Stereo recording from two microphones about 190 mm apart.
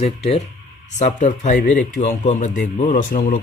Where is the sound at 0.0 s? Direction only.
35° left (ahead or behind).